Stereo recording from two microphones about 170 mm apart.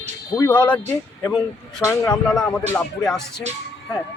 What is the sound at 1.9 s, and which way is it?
Speech, 5° left (ahead or behind).